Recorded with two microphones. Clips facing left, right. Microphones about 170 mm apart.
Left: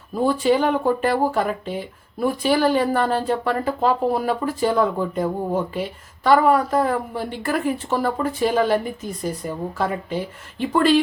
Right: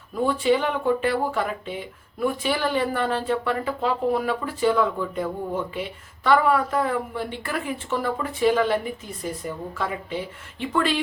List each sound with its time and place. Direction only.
0.2 s speech: 35° left (ahead or behind)